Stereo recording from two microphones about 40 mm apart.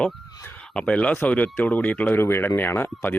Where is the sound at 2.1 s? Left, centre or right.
Left.